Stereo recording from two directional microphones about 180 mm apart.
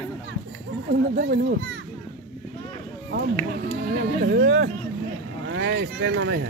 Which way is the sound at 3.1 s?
60° right (ahead or behind).